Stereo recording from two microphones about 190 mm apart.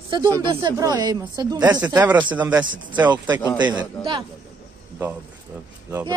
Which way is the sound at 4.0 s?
25° right (ahead or behind).